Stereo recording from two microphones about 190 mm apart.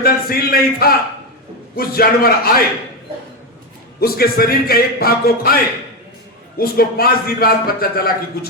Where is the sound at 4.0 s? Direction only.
55° left (ahead or behind).